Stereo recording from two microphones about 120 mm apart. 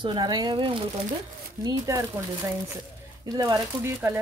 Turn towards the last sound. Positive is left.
turn(degrees=-20)  # may be behind; listen again after turning